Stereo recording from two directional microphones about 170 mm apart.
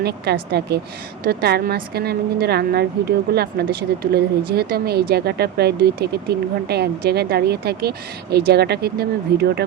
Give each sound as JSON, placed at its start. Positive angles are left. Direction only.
{"t": 0.0, "sound": "speech", "side_deg": -75}